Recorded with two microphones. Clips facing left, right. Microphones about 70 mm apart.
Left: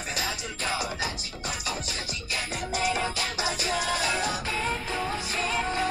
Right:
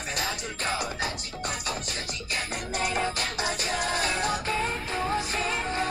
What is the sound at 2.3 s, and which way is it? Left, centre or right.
Music, right.